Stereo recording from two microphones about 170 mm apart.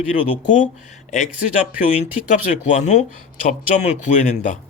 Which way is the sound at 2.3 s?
45° left (ahead or behind).